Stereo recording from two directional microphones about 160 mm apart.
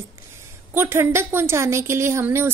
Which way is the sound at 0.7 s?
15° right (ahead or behind).